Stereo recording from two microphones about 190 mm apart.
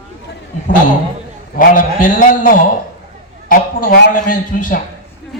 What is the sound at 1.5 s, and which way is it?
A man's voice, 45° left (ahead or behind).